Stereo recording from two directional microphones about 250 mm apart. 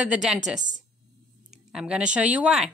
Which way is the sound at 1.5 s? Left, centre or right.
Centre.